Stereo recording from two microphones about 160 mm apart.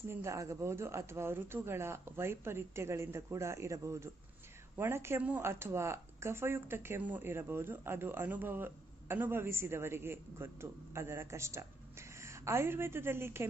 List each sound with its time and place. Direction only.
0.1 s speech: 20° right (ahead or behind)